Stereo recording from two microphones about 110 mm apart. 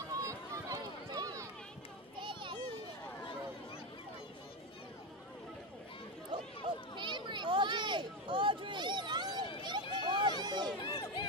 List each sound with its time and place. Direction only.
0.1 s run: 30° right (ahead or behind)
2.1 s children playing: 50° right (ahead or behind)
7.0 s a sound: 45° right (ahead or behind)
10.8 s run: 50° left (ahead or behind)